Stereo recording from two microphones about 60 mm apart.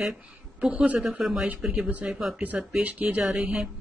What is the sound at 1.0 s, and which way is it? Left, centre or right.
Speech, centre.